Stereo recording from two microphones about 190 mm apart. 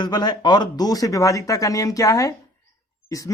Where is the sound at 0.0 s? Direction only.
20° left (ahead or behind).